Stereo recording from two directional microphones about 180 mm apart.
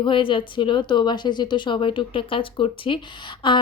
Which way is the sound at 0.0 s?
25° left (ahead or behind).